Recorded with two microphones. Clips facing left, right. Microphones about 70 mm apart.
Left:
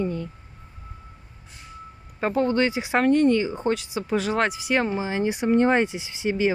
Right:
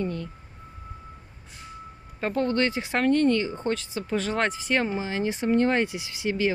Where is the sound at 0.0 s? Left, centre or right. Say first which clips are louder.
Left 3 dB; centre.